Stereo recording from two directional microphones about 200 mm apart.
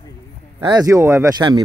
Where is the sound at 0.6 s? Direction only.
20° right (ahead or behind).